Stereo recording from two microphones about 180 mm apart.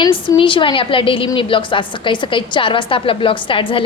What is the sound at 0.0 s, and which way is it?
A woman's voice, 30° left (ahead or behind).